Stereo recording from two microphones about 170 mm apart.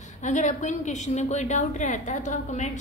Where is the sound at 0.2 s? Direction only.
45° left (ahead or behind).